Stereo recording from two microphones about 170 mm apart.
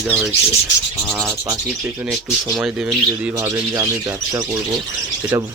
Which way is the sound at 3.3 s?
20° right (ahead or behind).